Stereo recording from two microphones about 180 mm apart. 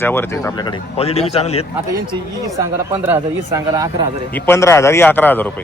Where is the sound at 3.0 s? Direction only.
15° right (ahead or behind).